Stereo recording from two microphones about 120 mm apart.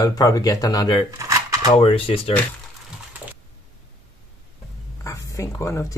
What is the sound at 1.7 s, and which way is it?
Speech, 50° left (ahead or behind).